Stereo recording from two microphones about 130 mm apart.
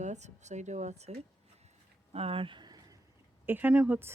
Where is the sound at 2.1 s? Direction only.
50° right (ahead or behind); by 3.0 s 30° right (ahead or behind).